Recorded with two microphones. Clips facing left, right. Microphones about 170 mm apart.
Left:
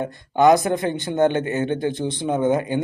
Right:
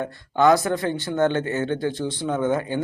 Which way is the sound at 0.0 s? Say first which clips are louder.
Left 2 dB; 20° left (ahead or behind).